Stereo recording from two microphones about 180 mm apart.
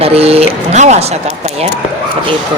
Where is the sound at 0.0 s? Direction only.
35° right (ahead or behind).